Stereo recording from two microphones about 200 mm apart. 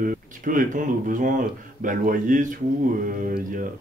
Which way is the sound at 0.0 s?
45° right (ahead or behind).